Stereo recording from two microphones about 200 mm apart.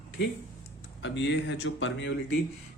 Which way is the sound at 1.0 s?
65° left (ahead or behind).